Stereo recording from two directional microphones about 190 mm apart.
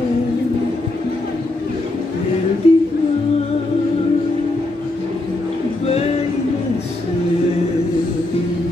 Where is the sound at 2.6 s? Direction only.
35° left (ahead or behind).